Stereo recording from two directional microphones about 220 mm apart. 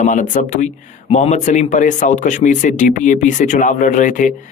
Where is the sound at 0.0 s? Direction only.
35° left (ahead or behind).